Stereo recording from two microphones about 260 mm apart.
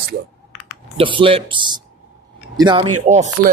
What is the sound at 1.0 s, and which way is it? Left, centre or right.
Speech, centre.